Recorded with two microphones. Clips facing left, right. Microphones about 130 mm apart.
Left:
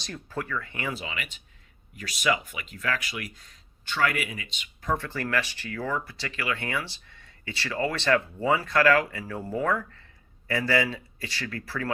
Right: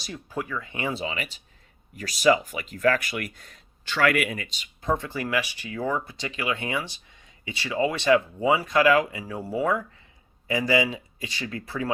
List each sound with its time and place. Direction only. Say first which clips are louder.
0.0 s speech: right 2 dB; 10° right (ahead or behind); by 4.7 s 40° right (ahead or behind)
4.8 s speech: right 2 dB; 20° right (ahead or behind)